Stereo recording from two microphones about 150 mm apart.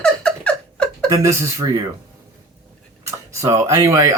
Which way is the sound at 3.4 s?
20° right (ahead or behind).